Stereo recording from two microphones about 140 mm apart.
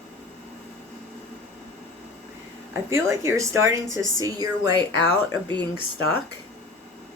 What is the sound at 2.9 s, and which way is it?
Speech, 20° right (ahead or behind).